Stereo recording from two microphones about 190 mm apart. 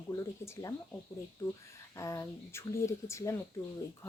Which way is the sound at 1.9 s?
15° left (ahead or behind).